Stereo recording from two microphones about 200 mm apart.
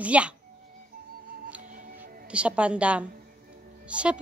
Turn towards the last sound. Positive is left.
turn(degrees=-5)  # may be behind; listen again after turning